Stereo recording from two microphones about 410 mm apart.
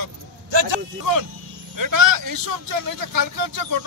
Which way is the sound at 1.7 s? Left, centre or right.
Right.